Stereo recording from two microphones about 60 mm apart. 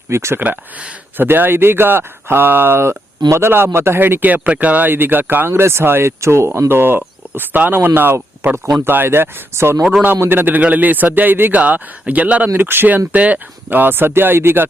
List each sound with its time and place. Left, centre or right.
0.1 s speech: right
0.3 s a man's voice: right
5.5 s a man's voice: right
12.5 s speech: right
13.1 s a man's voice: right
13.7 s speech: right